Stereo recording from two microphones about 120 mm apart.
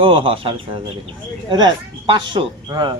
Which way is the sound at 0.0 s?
45° right (ahead or behind).